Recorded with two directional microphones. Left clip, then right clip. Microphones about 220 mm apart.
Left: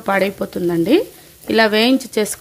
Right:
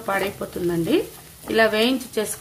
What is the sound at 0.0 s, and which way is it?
Speech, 40° left (ahead or behind).